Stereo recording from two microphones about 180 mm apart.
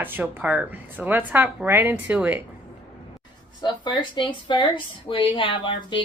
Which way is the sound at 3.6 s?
25° left (ahead or behind).